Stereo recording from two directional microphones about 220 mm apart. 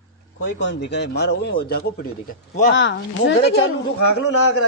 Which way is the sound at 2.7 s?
55° left (ahead or behind).